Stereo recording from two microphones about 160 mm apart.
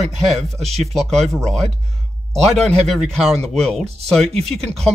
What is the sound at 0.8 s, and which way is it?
Speech, centre (ahead or behind).